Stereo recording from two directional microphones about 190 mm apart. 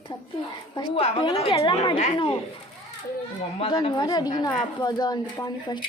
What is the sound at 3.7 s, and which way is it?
Speech, 20° left (ahead or behind).